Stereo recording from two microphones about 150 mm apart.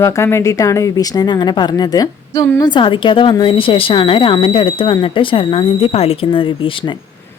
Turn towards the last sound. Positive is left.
turn(degrees=35)  # may be behind; listen again after turning